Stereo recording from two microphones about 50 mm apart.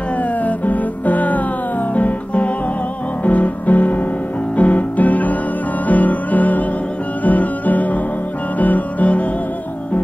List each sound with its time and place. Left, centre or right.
0.4 s music: left